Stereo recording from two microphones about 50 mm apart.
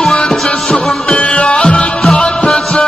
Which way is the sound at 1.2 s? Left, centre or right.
Left.